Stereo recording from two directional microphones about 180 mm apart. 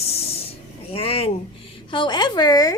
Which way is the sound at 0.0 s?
35° left (ahead or behind).